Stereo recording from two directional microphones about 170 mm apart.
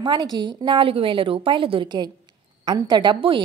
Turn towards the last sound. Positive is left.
turn(degrees=-30)  # may be behind; listen again after turning